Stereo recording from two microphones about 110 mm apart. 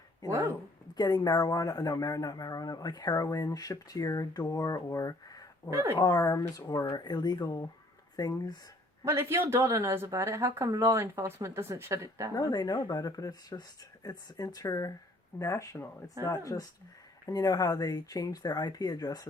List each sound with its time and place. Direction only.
0.3 s speech: 25° right (ahead or behind)
0.9 s speech: 40° left (ahead or behind)
5.7 s speech: 25° right (ahead or behind)
6.0 s speech: 35° left (ahead or behind)
9.0 s speech: 20° right (ahead or behind)
12.3 s speech: 35° left (ahead or behind)